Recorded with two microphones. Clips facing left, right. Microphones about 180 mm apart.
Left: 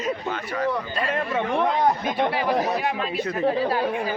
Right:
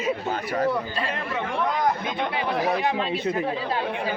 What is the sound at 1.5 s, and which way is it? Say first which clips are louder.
Speech: left 2 dB; 30° left (ahead or behind).